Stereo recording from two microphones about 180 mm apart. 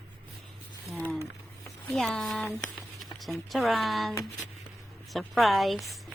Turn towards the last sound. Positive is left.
turn(degrees=0)  # may be behind; listen again after turning